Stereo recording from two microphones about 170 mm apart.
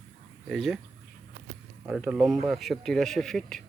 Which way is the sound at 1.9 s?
Centre (ahead or behind).